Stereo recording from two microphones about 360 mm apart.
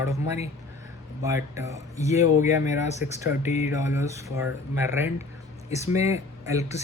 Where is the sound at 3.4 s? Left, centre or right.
Centre.